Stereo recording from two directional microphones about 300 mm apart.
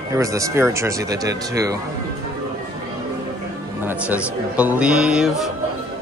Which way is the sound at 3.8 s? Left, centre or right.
Centre.